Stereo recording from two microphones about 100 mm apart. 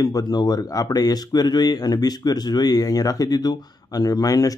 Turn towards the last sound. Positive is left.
turn(degrees=40)  # may be behind; listen again after turning